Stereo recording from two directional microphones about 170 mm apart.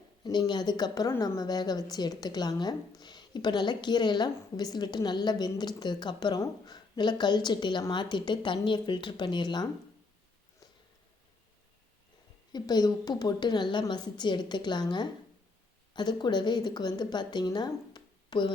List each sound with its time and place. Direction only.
0.3 s a woman's voice: 25° left (ahead or behind)
12.5 s a woman's voice: 25° left (ahead or behind)